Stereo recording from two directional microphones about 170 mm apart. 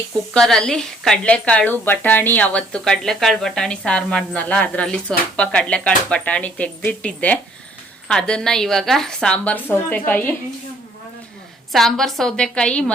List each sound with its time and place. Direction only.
0.3 s a woman's voice: 5° left (ahead or behind)
11.7 s a woman's voice: centre (ahead or behind)